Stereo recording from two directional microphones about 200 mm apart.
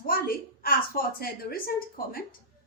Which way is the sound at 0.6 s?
50° left (ahead or behind).